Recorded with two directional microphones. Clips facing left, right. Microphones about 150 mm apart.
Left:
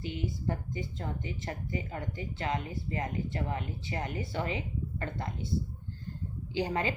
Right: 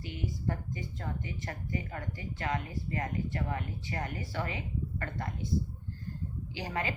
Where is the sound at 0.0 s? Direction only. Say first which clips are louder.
Left 2 dB; 25° left (ahead or behind).